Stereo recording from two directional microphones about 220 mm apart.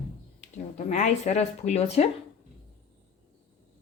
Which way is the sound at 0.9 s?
30° left (ahead or behind).